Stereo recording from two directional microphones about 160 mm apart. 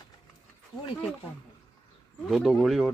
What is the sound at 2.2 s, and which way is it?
Speech, centre (ahead or behind).